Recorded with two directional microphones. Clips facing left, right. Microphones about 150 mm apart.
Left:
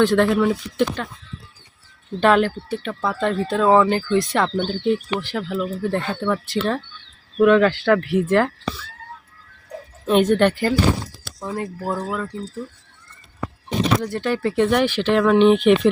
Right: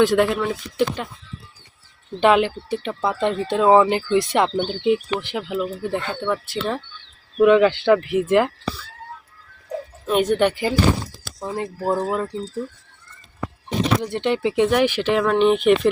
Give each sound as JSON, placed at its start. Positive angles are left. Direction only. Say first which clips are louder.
{"t": 0.0, "sound": "speech", "louder": "left 1 dB", "side_deg": -5}
{"t": 2.2, "sound": "speech", "louder": "even", "side_deg": -15}
{"t": 6.1, "sound": "speech", "louder": "left 2 dB", "side_deg": -5}
{"t": 10.1, "sound": "speech", "louder": "left 2 dB", "side_deg": -5}
{"t": 11.3, "sound": "speech", "louder": "right 1 dB", "side_deg": -25}
{"t": 14.0, "sound": "speech", "louder": "right 1 dB", "side_deg": -20}